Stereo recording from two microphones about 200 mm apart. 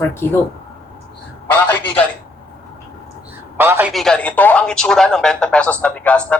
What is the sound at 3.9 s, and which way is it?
Speech, centre (ahead or behind).